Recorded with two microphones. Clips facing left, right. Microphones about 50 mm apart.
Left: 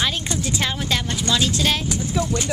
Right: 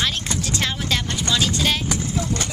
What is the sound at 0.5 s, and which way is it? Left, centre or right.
Speech, centre.